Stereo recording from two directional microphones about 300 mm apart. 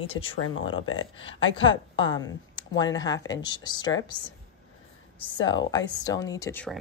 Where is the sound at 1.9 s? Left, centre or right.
Centre.